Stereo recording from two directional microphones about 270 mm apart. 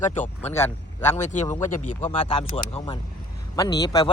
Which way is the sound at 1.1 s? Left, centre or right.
Left.